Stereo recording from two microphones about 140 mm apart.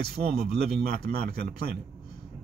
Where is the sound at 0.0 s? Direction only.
90° right.